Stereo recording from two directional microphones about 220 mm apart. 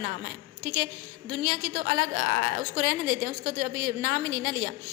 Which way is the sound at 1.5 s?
40° right (ahead or behind).